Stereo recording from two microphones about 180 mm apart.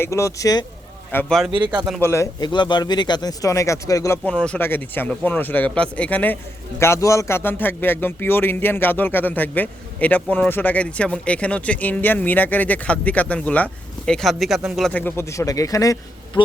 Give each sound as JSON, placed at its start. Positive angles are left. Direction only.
{"t": 0.0, "sound": "speech", "side_deg": 15}
{"t": 1.1, "sound": "a man's voice", "side_deg": 5}
{"t": 1.5, "sound": "speech", "side_deg": -25}
{"t": 2.0, "sound": "speech", "side_deg": 15}
{"t": 4.3, "sound": "speech", "side_deg": 5}